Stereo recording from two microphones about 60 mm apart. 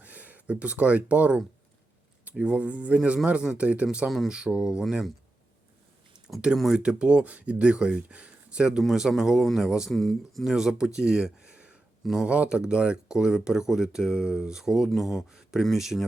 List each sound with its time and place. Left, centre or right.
0.0 s speech: right
2.4 s speech: right
6.7 s speech: centre
9.9 s speech: centre
10.5 s speech: centre